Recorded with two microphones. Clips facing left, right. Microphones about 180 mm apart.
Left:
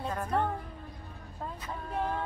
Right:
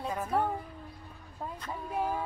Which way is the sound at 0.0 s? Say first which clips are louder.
Even; 5° right (ahead or behind).